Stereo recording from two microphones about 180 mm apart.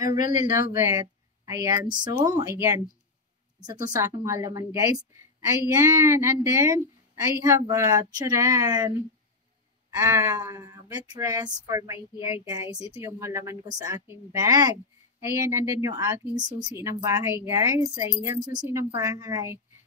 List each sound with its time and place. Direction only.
0.4 s a woman's voice: 15° right (ahead or behind)
9.9 s a woman's voice: 15° right (ahead or behind)